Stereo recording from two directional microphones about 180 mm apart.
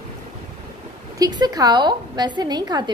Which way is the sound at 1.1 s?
20° right (ahead or behind).